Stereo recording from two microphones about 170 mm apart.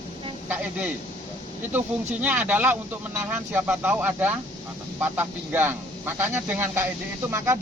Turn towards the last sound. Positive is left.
turn(degrees=-15)  # may be behind; listen again after turning